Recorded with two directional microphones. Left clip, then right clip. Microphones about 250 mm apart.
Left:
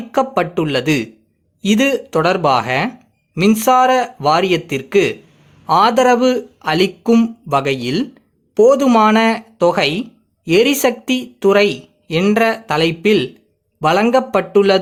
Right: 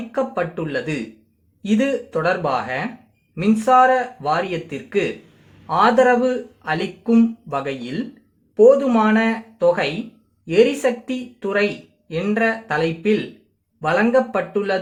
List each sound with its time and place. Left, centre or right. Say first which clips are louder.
0.1 s speech: left 7 dB; left